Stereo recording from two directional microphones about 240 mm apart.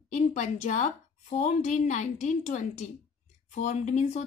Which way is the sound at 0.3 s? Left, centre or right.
Left.